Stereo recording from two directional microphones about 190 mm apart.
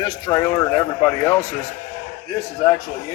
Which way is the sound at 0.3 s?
15° left (ahead or behind).